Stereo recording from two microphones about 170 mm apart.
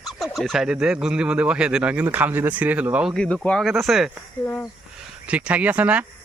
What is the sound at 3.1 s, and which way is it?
Speech, 5° left (ahead or behind).